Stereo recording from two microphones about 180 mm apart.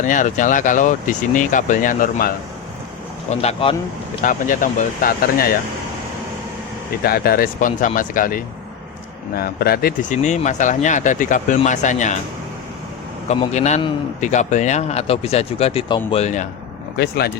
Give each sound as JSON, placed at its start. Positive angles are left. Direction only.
{"t": 0.0, "sound": "speech", "side_deg": 45}
{"t": 3.2, "sound": "a man's voice", "side_deg": 35}
{"t": 4.2, "sound": "speech", "side_deg": 45}
{"t": 7.0, "sound": "speech", "side_deg": 55}
{"t": 13.2, "sound": "a man's voice", "side_deg": 40}
{"t": 17.0, "sound": "speech", "side_deg": 60}